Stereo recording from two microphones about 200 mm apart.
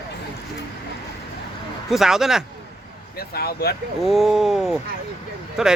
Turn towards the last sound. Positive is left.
turn(degrees=0)  # may be behind; listen again after turning